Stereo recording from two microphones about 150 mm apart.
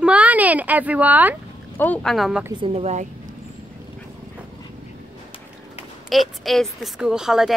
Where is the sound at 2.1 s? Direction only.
Centre (ahead or behind).